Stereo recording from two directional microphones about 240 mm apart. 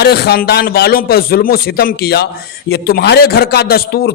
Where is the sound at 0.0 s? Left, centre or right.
Left.